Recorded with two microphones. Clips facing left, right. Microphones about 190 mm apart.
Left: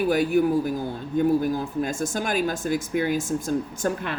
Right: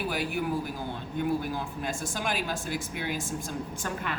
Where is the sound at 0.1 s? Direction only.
45° left (ahead or behind).